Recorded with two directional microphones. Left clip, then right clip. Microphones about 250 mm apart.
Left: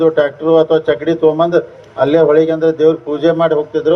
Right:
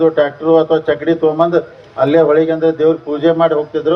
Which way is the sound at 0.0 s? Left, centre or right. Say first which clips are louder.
Even; left.